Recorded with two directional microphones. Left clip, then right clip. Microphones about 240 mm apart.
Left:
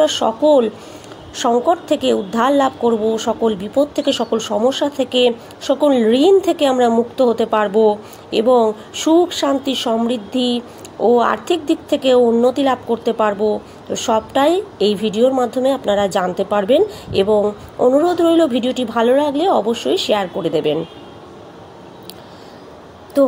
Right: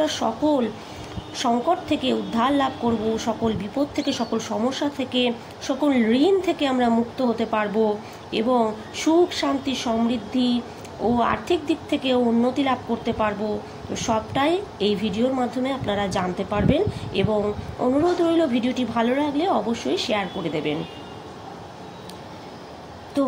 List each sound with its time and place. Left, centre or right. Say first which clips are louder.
0.0 s a woman's voice: left 8 dB; centre
3.9 s speech: left 8 dB; centre
4.5 s a woman's voice: left 8 dB; centre